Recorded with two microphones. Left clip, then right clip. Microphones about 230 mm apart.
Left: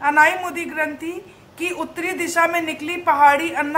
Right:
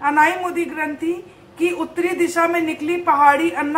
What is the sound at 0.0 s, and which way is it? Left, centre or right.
A man's voice, left.